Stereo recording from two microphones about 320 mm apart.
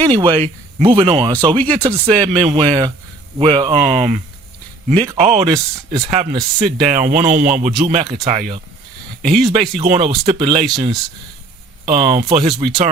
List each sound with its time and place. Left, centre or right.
0.0 s speech: centre
11.9 s speech: right